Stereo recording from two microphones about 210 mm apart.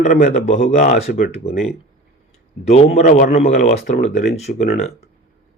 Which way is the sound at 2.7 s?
30° left (ahead or behind).